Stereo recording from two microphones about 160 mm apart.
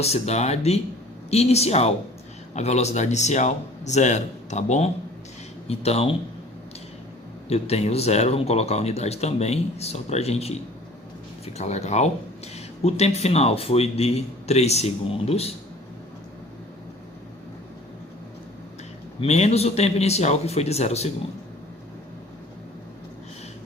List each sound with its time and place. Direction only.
0.0 s speech: 40° left (ahead or behind)
7.4 s speech: 40° left (ahead or behind)
19.2 s speech: 40° left (ahead or behind)